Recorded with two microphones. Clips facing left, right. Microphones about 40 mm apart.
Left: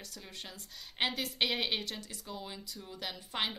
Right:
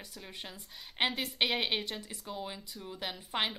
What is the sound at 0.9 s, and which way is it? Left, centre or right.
A woman's voice, centre.